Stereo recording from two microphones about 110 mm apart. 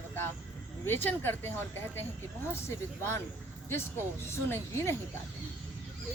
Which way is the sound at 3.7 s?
25° left (ahead or behind).